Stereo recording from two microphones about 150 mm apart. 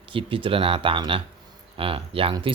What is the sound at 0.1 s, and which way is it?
Speech, 35° right (ahead or behind).